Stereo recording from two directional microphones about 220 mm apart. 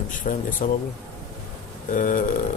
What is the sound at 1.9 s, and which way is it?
Speech, 35° left (ahead or behind).